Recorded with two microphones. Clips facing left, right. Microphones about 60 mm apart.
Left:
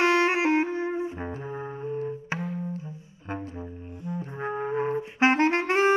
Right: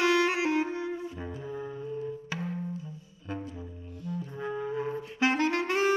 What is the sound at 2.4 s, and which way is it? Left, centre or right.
Music, left.